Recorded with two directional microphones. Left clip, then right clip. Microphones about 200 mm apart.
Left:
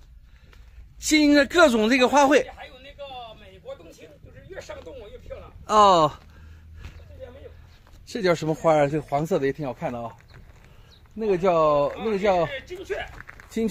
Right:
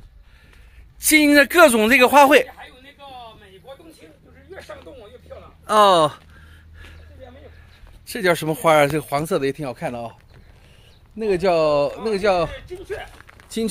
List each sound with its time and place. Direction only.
1.0 s speech: 5° right (ahead or behind)
5.7 s speech: centre (ahead or behind)
8.1 s speech: 5° right (ahead or behind)
11.1 s speech: 5° right (ahead or behind)
12.4 s speech: 55° left (ahead or behind)
13.2 s a sound: 5° left (ahead or behind)